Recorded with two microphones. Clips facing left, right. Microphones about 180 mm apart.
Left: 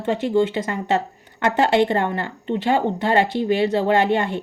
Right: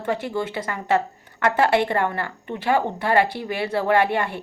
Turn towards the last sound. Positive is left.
turn(degrees=20)  # may be behind; listen again after turning